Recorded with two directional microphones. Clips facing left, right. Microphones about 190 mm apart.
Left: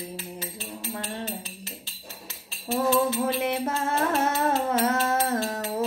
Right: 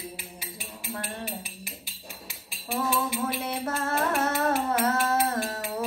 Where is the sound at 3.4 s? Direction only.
20° left (ahead or behind).